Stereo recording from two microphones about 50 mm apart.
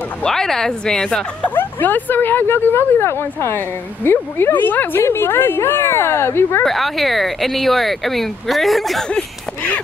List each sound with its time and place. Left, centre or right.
0.2 s a woman's voice: centre
1.5 s speech: left
5.0 s a woman's voice: left
6.6 s speech: centre